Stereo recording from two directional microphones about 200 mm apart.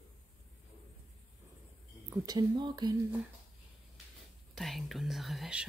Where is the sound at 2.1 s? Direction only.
20° right (ahead or behind).